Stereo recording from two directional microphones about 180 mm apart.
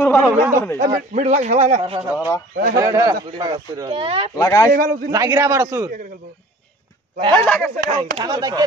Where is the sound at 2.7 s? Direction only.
20° right (ahead or behind).